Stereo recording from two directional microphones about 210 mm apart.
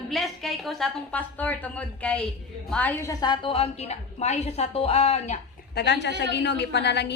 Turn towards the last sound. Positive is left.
turn(degrees=55)  # may be behind; listen again after turning